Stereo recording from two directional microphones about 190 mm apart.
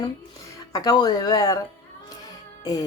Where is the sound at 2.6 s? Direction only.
20° left (ahead or behind).